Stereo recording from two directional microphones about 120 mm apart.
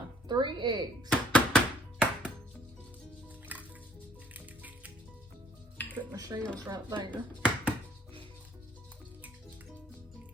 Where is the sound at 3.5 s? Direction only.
15° right (ahead or behind).